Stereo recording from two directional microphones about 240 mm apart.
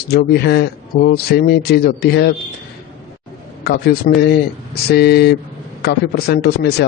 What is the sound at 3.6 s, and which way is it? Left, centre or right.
A man's voice, left.